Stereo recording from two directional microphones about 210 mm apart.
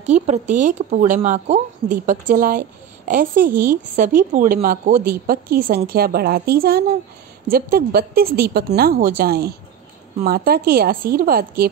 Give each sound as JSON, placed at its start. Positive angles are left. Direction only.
{"t": 0.0, "sound": "a woman's voice", "side_deg": -30}